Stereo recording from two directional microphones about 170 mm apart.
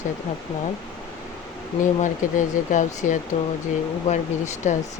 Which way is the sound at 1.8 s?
50° left (ahead or behind).